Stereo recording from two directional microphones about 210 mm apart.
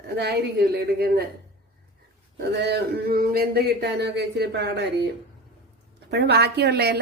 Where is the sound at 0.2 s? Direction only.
50° right (ahead or behind).